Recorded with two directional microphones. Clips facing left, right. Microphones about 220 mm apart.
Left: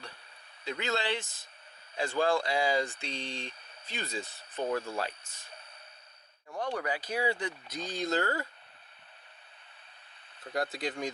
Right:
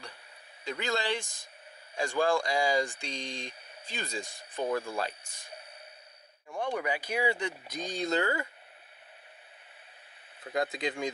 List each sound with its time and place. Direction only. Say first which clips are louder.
0.6 s speech: right 1 dB; 10° right (ahead or behind)
6.6 s speech: right 2 dB; 10° right (ahead or behind)
10.7 s speech: right 2 dB; 20° right (ahead or behind)